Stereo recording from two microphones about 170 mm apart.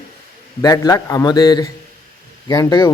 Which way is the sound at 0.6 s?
20° left (ahead or behind).